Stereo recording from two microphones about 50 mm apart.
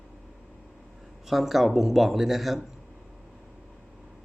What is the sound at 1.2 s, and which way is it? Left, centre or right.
Speech, centre.